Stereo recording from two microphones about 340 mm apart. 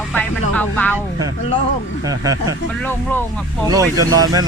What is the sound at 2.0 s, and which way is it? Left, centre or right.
Speech, centre.